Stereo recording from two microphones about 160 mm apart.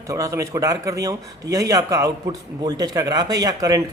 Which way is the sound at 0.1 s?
20° right (ahead or behind).